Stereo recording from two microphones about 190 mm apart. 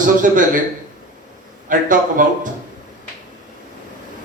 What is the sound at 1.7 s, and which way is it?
Speech, 45° right (ahead or behind).